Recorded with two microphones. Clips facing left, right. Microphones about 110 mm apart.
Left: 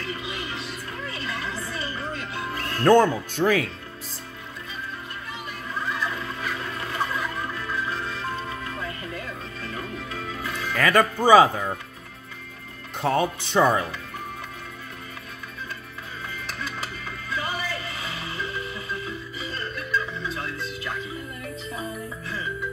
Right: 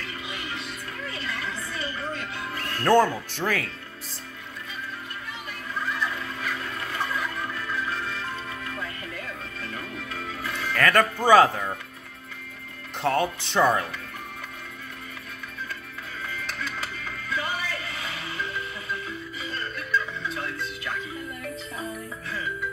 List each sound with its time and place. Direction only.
0.3 s music: 30° left (ahead or behind)
2.9 s speech: centre (ahead or behind)
6.1 s music: 25° left (ahead or behind)
10.7 s music: 5° left (ahead or behind)
11.2 s speech: 5° left (ahead or behind)
13.0 s speech: 5° left (ahead or behind)